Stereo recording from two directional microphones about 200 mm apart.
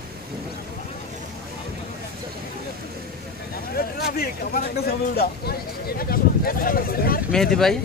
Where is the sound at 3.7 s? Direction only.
50° left (ahead or behind).